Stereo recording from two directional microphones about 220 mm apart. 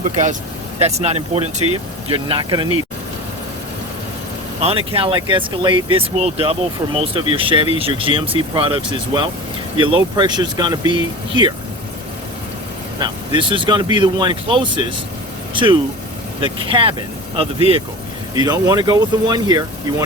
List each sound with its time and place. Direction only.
0.8 s speech: 30° right (ahead or behind)
4.6 s speech: 25° right (ahead or behind)
13.0 s speech: 20° right (ahead or behind)